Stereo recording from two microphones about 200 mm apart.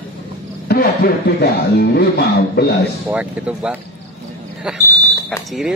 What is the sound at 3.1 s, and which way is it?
Speech, 5° right (ahead or behind).